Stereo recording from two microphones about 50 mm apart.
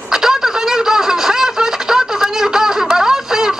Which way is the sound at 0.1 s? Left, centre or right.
Centre.